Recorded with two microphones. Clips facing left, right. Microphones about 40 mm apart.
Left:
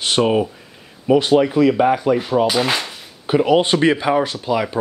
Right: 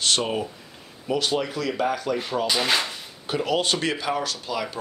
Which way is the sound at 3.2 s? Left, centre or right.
Left.